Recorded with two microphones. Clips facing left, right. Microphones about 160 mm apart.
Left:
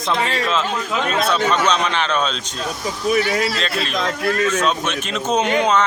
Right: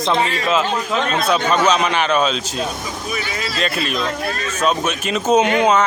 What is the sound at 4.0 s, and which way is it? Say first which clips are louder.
Speech: left 3 dB; 90° left.